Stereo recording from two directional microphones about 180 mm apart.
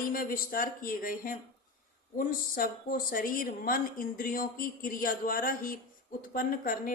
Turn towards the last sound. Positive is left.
turn(degrees=50)  # may be behind; listen again after turning